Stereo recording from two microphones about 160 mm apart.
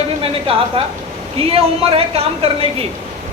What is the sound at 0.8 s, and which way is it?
A woman's voice, 35° right (ahead or behind).